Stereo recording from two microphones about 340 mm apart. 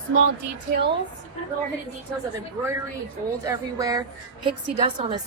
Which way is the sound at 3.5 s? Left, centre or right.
Centre.